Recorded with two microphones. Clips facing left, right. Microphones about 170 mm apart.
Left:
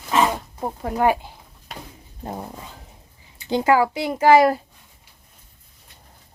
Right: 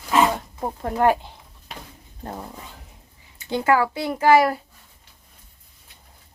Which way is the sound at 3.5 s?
20° left (ahead or behind).